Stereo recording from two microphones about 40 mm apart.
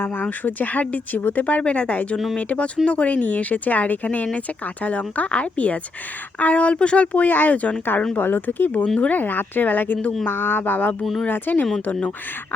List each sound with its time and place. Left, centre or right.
0.0 s speech: left
8.1 s speech: left
9.0 s speech: left
9.2 s speech: left
10.2 s speech: left